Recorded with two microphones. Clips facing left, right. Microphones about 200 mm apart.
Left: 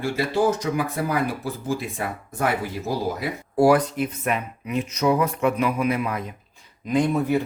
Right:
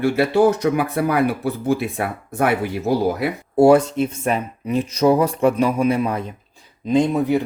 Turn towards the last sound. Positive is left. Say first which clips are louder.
# right 4 dB
turn(degrees=-15)  # may be behind; listen again after turning